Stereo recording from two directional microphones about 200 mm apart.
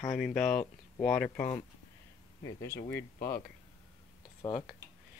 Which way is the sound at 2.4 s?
15° left (ahead or behind).